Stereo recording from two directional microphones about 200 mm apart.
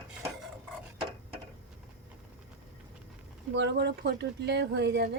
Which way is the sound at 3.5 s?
60° right (ahead or behind).